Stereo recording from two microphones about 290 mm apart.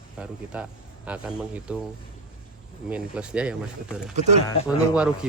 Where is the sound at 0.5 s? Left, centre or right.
Centre.